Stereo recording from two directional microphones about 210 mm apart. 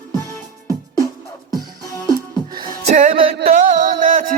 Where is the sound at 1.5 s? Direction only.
15° right (ahead or behind).